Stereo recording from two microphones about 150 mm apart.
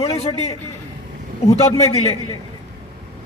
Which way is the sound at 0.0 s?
45° left (ahead or behind).